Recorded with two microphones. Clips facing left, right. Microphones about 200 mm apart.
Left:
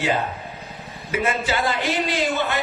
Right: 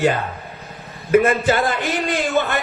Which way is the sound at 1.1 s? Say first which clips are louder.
Right 8 dB; 50° right (ahead or behind).